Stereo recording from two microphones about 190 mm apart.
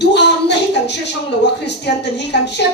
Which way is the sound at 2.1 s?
65° left (ahead or behind).